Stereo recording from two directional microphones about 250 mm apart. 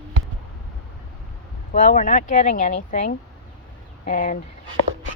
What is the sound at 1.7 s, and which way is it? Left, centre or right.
Speech, left.